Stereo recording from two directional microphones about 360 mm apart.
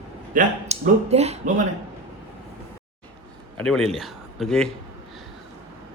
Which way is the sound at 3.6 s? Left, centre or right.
Centre.